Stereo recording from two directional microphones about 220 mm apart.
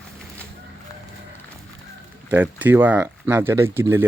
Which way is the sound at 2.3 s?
10° right (ahead or behind).